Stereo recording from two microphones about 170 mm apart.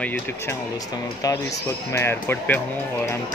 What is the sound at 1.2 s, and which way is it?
Speech, 20° left (ahead or behind).